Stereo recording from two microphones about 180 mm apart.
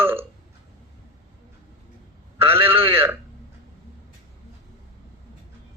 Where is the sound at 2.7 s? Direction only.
30° right (ahead or behind).